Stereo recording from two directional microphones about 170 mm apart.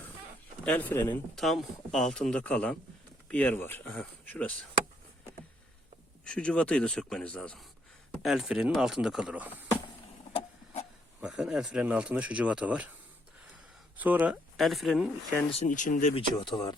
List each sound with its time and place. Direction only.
0.6 s speech: 10° left (ahead or behind)
1.4 s speech: centre (ahead or behind)
6.2 s speech: 5° left (ahead or behind)
11.2 s speech: 5° right (ahead or behind)
13.9 s speech: 10° right (ahead or behind)
14.5 s speech: centre (ahead or behind)
15.4 s speech: 40° left (ahead or behind)
16.1 s speech: 25° left (ahead or behind)